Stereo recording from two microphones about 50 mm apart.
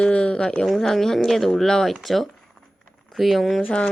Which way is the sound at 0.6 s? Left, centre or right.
Centre.